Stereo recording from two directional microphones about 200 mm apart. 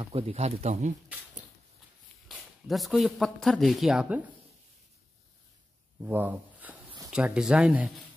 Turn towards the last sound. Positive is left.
turn(degrees=-5)  # may be behind; listen again after turning